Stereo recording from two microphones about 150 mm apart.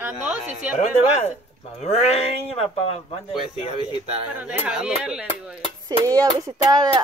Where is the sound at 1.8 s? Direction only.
45° left (ahead or behind).